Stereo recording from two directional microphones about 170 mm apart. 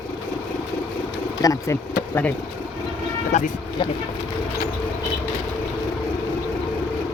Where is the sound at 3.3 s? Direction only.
45° left (ahead or behind).